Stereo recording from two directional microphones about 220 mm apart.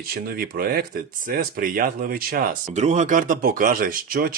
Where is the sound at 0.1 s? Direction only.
40° right (ahead or behind).